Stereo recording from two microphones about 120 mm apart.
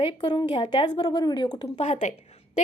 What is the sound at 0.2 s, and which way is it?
A woman's voice, 35° left (ahead or behind).